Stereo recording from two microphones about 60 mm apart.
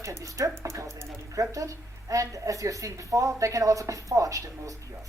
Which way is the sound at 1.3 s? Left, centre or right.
Right.